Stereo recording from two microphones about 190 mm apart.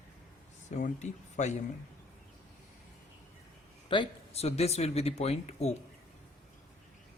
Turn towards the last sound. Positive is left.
turn(degrees=35)  # may be behind; listen again after turning